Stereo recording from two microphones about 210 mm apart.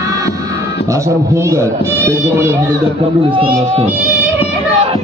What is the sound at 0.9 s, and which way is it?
A man's voice, 15° right (ahead or behind).